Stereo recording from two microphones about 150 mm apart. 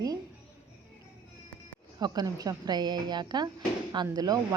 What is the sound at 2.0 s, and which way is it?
A woman's voice, 25° right (ahead or behind).